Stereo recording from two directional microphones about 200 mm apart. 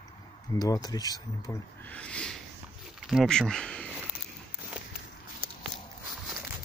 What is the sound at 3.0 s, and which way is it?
Speech, centre (ahead or behind).